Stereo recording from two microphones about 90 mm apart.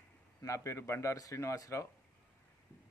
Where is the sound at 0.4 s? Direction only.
35° left (ahead or behind).